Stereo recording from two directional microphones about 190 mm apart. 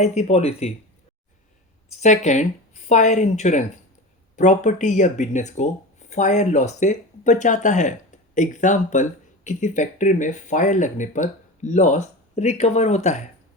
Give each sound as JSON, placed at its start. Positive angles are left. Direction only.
{"t": 0.0, "sound": "speech", "side_deg": 35}
{"t": 1.9, "sound": "speech", "side_deg": 40}